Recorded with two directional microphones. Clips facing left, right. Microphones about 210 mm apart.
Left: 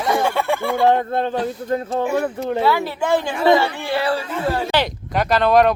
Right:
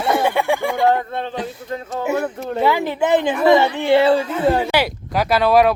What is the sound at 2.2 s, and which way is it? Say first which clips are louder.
Speech: left 2 dB; 10° left (ahead or behind).